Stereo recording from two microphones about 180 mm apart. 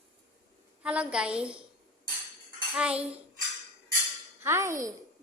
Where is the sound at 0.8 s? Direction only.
5° right (ahead or behind).